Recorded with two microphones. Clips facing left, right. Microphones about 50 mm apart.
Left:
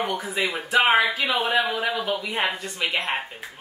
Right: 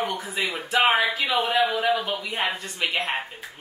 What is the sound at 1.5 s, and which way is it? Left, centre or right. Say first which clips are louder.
Speech: right 1 dB; centre.